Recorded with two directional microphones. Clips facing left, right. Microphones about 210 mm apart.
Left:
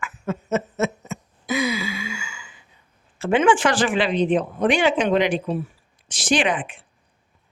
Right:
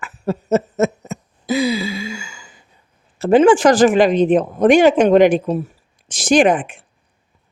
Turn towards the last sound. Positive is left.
turn(degrees=-45)  # may be behind; listen again after turning